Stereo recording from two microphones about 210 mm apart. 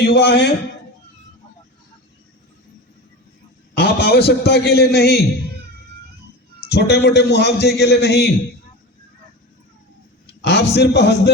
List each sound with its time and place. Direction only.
0.0 s a man's voice: 55° left (ahead or behind)
3.8 s a man's voice: 50° left (ahead or behind)
6.7 s a man's voice: 50° left (ahead or behind)
10.4 s a man's voice: 55° left (ahead or behind)